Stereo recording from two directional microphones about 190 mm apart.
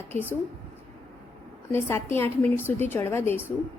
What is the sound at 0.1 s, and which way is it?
Speech, 10° left (ahead or behind).